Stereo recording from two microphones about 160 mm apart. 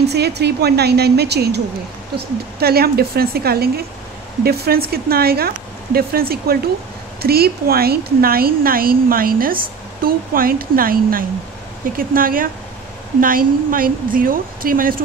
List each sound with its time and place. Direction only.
0.0 s speech: 90° right
2.1 s speech: 75° right (ahead or behind)